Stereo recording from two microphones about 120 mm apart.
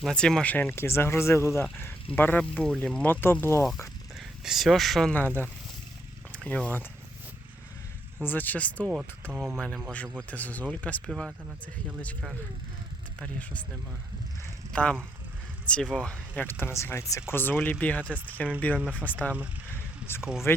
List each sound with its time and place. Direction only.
0.0 s speech: 5° left (ahead or behind)
3.7 s speech: centre (ahead or behind)
6.3 s speech: 10° left (ahead or behind)
8.2 s speech: 15° left (ahead or behind)
9.3 s speech: 5° right (ahead or behind)
9.6 s speech: 5° left (ahead or behind)
11.0 s speech: centre (ahead or behind)
13.2 s speech: 10° left (ahead or behind)
14.7 s speech: 10° left (ahead or behind)
18.8 s speech: 15° right (ahead or behind)
19.7 s vehicle: 20° left (ahead or behind)
20.5 s speech: 20° left (ahead or behind)